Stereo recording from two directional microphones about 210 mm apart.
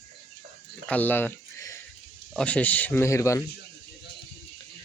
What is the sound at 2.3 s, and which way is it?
Speech, 5° left (ahead or behind).